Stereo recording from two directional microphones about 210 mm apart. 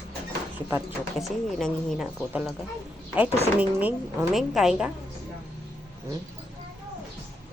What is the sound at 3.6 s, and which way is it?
Speech, 5° right (ahead or behind).